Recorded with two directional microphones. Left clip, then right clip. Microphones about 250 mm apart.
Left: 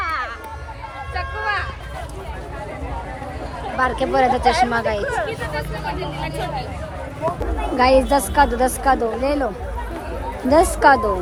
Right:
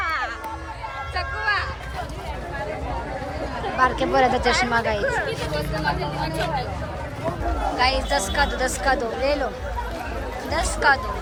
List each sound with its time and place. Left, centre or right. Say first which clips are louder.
0.0 s a sound: left 1 dB; centre
3.8 s speech: left 1 dB; centre
4.4 s a woman's voice: left 4 dB; centre
4.7 s speech: left 1 dB; centre
7.8 s a woman's voice: left 8 dB; centre
10.5 s a woman's voice: left 7 dB; centre